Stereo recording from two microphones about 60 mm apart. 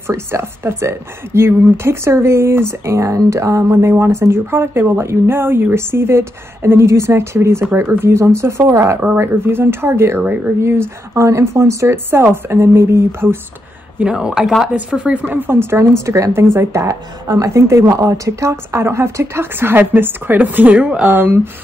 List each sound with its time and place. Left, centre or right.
0.0 s speech: right
3.2 s speech: right
9.2 s speech: right
14.0 s a woman's voice: centre
14.4 s speech: centre
15.1 s speech: right
21.1 s speech: right